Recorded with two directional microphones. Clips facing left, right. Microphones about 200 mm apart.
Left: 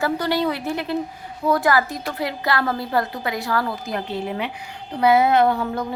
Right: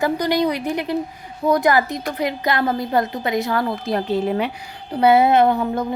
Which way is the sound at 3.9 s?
40° right (ahead or behind).